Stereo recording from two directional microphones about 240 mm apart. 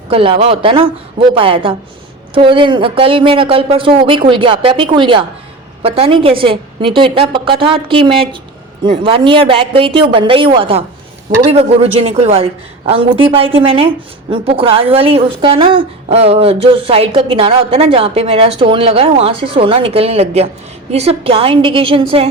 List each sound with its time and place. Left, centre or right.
0.1 s a woman's voice: right